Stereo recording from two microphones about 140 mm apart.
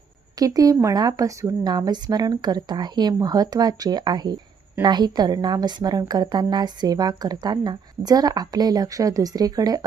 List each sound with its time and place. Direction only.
0.3 s a woman's voice: 25° right (ahead or behind)